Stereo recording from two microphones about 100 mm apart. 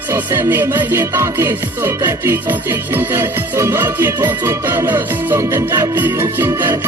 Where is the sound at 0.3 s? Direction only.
25° right (ahead or behind).